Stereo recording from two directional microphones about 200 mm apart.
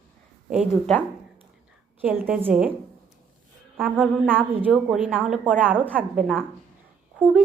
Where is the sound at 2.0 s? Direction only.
10° right (ahead or behind).